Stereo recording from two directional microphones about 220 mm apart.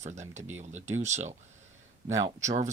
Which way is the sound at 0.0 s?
30° right (ahead or behind).